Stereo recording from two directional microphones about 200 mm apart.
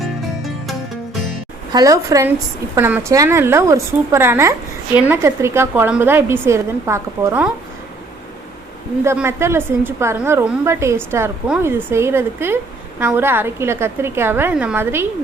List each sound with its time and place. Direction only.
1.7 s a woman's voice: 15° right (ahead or behind)
9.0 s a woman's voice: 10° right (ahead or behind)